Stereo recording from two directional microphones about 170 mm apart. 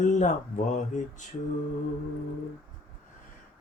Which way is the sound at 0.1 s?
45° left (ahead or behind).